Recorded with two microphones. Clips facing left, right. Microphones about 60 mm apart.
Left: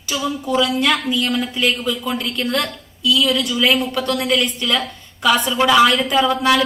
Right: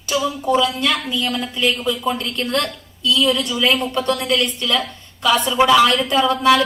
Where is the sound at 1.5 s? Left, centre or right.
Centre.